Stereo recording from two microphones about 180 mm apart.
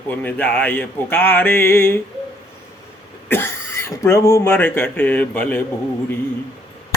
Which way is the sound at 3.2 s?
10° left (ahead or behind).